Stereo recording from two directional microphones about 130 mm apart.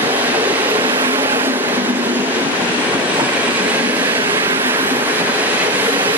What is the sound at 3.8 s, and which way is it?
Train, 15° right (ahead or behind).